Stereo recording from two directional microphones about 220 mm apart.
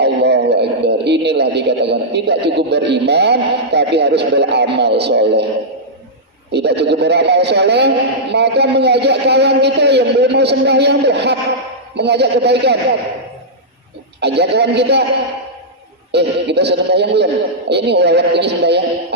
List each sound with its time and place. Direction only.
0.0 s a man's voice: 50° right (ahead or behind)
6.5 s a man's voice: 50° right (ahead or behind)
14.2 s a man's voice: 50° right (ahead or behind)
16.1 s a man's voice: 50° right (ahead or behind)